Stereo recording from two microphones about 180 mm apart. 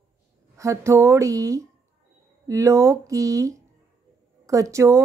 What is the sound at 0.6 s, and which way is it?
Speech, 15° right (ahead or behind).